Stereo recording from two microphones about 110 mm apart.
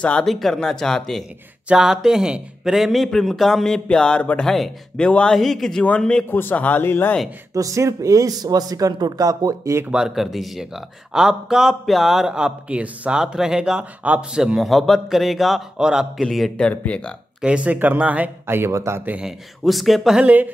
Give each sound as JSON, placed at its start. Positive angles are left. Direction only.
{"t": 0.0, "sound": "speech", "side_deg": 5}
{"t": 7.5, "sound": "speech", "side_deg": -30}
{"t": 9.8, "sound": "speech", "side_deg": -5}
{"t": 17.4, "sound": "speech", "side_deg": -10}
{"t": 19.1, "sound": "speech", "side_deg": -5}
{"t": 20.2, "sound": "speech", "side_deg": -15}